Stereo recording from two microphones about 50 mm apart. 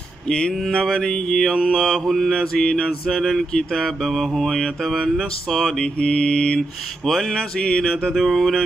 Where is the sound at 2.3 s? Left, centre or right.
Centre.